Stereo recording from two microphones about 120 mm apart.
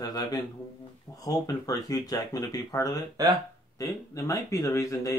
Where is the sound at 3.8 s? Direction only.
25° left (ahead or behind).